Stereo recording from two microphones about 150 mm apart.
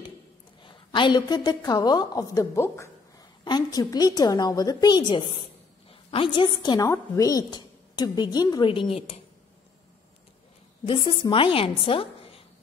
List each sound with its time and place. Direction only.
0.6 s a woman's voice: 30° left (ahead or behind)
10.9 s a woman's voice: 35° left (ahead or behind)